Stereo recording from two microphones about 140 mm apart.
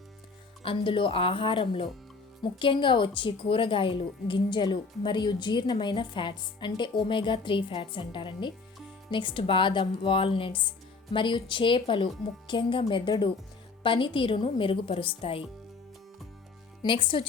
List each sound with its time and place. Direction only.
0.6 s a woman's voice: 40° left (ahead or behind)
16.8 s a woman's voice: 35° left (ahead or behind)